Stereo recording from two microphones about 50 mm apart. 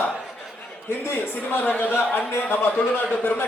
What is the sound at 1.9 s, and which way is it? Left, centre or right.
Speech, left.